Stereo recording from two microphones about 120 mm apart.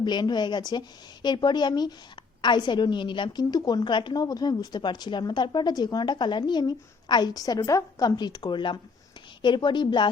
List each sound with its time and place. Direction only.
0.0 s a woman's voice: 35° left (ahead or behind)